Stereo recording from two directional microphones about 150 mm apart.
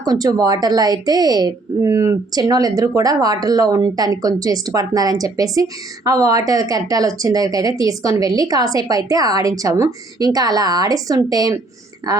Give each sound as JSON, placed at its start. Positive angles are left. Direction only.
{"t": 0.0, "sound": "speech", "side_deg": -25}